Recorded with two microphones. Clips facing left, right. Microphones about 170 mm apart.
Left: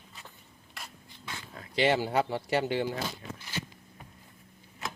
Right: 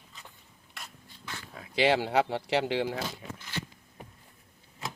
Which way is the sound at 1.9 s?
80° right.